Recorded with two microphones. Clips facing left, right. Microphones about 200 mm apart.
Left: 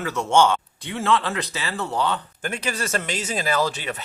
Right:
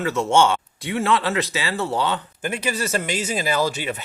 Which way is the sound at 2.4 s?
5° right (ahead or behind).